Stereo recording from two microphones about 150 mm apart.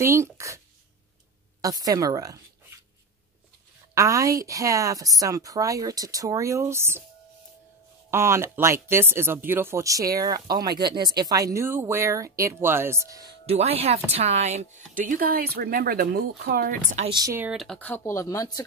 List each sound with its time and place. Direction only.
0.0 s speech: 20° right (ahead or behind)
1.6 s speech: 25° right (ahead or behind)
3.9 s speech: 20° right (ahead or behind)
8.1 s speech: 15° right (ahead or behind)
13.5 s speech: 40° right (ahead or behind); by 17.0 s 70° right (ahead or behind)
17.1 s speech: 25° right (ahead or behind)
17.4 s speech: centre (ahead or behind)
17.7 s speech: 10° left (ahead or behind)